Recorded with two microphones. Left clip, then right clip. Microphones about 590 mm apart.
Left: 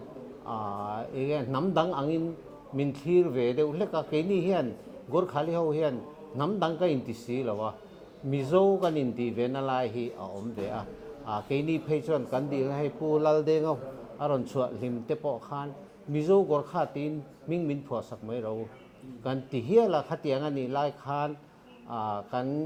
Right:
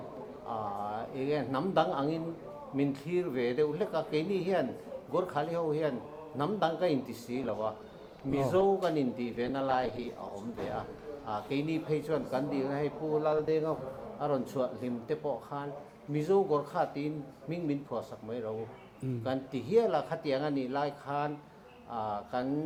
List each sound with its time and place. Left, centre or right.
0.4 s speech: left
11.3 s speech: left